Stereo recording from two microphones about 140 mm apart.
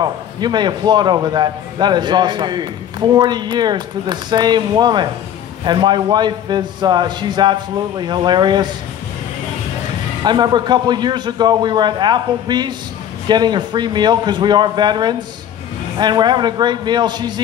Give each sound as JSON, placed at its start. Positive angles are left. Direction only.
{"t": 0.0, "sound": "a man's voice", "side_deg": -30}
{"t": 10.2, "sound": "a man's voice", "side_deg": -30}